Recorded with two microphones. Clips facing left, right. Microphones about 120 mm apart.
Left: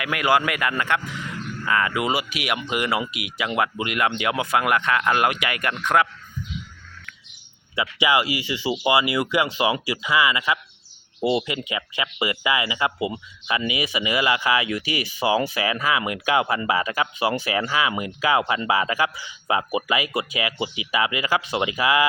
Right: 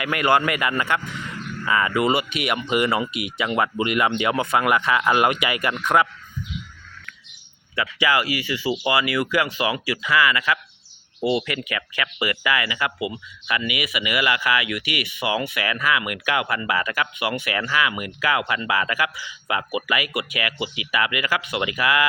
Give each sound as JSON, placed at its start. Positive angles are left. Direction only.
{"t": 0.0, "sound": "speech", "side_deg": 0}
{"t": 7.8, "sound": "speech", "side_deg": 20}